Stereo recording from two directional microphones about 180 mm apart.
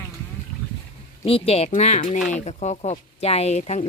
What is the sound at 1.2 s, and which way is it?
Speech, 35° left (ahead or behind).